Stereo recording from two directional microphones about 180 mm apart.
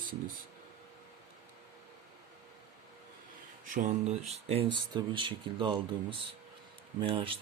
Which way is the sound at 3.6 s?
45° right (ahead or behind).